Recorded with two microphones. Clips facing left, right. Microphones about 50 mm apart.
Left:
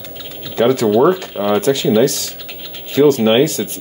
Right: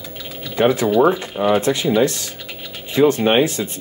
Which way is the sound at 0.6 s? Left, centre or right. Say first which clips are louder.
Left 3 dB; centre.